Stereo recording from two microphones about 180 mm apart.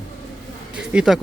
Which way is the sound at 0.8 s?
5° right (ahead or behind).